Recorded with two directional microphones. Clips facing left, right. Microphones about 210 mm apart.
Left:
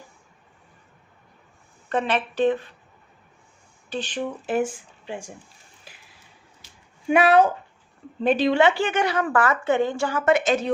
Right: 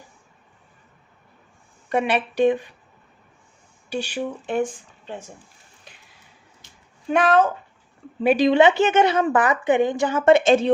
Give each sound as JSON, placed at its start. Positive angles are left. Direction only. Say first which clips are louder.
{"t": 1.9, "sound": "a woman's voice", "louder": "right 2 dB", "side_deg": -10}
{"t": 3.8, "sound": "speech", "louder": "right 2 dB", "side_deg": -10}
{"t": 4.4, "sound": "speech", "louder": "left 1 dB", "side_deg": 5}
{"t": 5.8, "sound": "a sound", "louder": "even", "side_deg": 0}
{"t": 7.1, "sound": "speech", "louder": "left 1 dB", "side_deg": 10}
{"t": 8.2, "sound": "a woman's voice", "louder": "right 3 dB", "side_deg": -10}